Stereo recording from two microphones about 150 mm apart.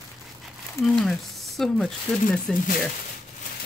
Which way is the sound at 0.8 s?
Centre (ahead or behind).